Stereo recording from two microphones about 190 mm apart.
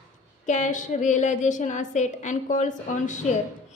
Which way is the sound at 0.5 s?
40° left (ahead or behind).